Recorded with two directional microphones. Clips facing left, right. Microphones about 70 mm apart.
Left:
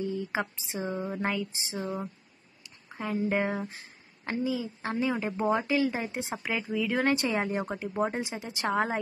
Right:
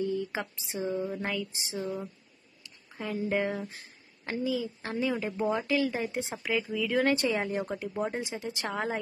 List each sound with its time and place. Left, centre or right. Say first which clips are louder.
0.0 s a woman's voice: even; centre
3.3 s a woman's voice: left 1 dB; left
5.5 s a woman's voice: left 2 dB; left
6.5 s a woman's voice: right 1 dB; centre
7.5 s a woman's voice: left 1 dB; left